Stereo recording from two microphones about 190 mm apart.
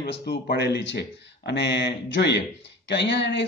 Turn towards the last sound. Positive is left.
turn(degrees=65)  # may be behind; listen again after turning